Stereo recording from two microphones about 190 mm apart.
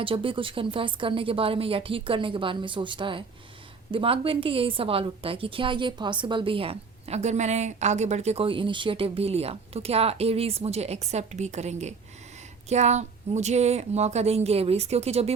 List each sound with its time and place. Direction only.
0.0 s a woman's voice: 30° right (ahead or behind)